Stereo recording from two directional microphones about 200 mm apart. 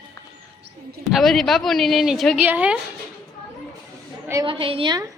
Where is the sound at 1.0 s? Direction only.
Centre (ahead or behind).